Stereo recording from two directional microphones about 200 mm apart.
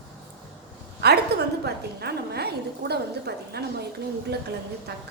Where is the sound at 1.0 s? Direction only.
55° right (ahead or behind).